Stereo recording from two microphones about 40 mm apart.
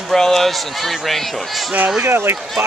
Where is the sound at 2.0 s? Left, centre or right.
Right.